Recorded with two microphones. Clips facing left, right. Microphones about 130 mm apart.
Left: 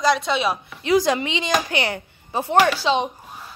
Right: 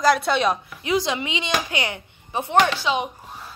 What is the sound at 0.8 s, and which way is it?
A woman's voice, 40° left (ahead or behind).